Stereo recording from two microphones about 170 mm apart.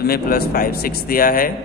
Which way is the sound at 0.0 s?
60° left (ahead or behind).